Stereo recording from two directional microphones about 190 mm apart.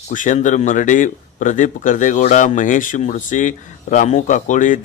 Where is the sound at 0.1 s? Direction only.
40° left (ahead or behind).